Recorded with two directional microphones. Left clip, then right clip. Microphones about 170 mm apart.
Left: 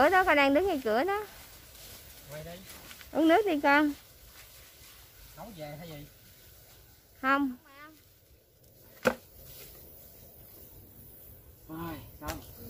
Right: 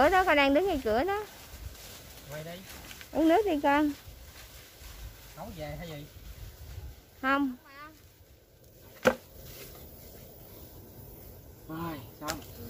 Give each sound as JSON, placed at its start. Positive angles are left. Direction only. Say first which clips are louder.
{"t": 0.0, "sound": "speech", "louder": "even", "side_deg": 15}
{"t": 3.1, "sound": "speech", "louder": "even", "side_deg": 20}
{"t": 5.4, "sound": "speech", "louder": "right 3 dB", "side_deg": 5}
{"t": 7.2, "sound": "speech", "louder": "left 1 dB", "side_deg": 20}
{"t": 9.0, "sound": "chopping", "louder": "right 3 dB", "side_deg": 20}
{"t": 11.7, "sound": "speech", "louder": "right 2 dB", "side_deg": 10}